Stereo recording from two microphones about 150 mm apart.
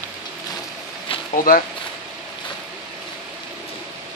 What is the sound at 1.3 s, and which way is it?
Speech, 70° left (ahead or behind).